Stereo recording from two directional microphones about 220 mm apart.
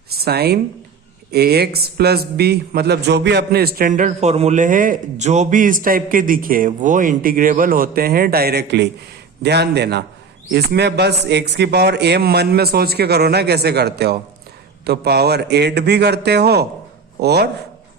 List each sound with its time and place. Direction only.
0.2 s a man's voice: 45° right (ahead or behind)